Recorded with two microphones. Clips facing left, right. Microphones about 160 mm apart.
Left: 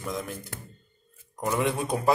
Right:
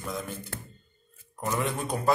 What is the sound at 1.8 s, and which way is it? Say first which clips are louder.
Speech: even; 20° left (ahead or behind).